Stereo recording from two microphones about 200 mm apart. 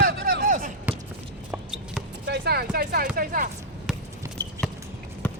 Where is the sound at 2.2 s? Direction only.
55° right (ahead or behind).